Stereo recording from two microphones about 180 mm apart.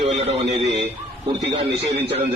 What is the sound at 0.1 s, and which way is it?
Speech, 35° right (ahead or behind).